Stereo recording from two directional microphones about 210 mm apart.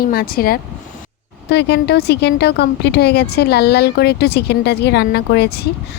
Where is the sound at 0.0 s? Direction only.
45° left (ahead or behind).